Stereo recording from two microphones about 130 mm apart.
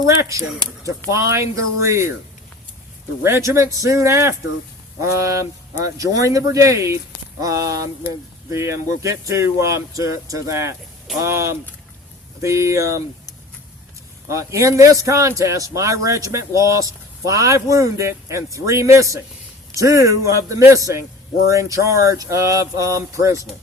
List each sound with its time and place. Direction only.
0.2 s speech: 25° right (ahead or behind)
3.2 s speech: 20° right (ahead or behind)
14.3 s speech: 25° right (ahead or behind)